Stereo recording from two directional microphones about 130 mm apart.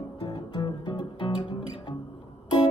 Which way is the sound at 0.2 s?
35° left (ahead or behind).